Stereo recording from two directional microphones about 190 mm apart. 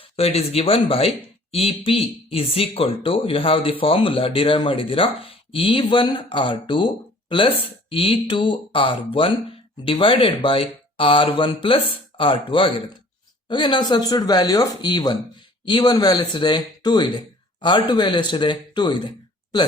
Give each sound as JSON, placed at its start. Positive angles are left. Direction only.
{"t": 0.2, "sound": "speech", "side_deg": 30}